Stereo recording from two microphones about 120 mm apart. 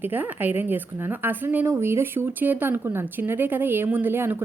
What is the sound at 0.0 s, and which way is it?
A woman's voice, 15° right (ahead or behind).